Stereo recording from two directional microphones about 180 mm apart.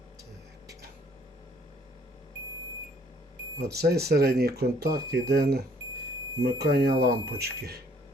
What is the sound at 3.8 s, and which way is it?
Speech, 60° right (ahead or behind).